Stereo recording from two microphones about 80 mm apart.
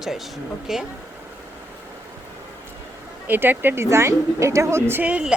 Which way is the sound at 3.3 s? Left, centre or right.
Right.